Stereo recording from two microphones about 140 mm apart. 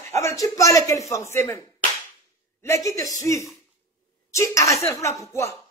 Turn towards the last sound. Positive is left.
turn(degrees=20)  # may be behind; listen again after turning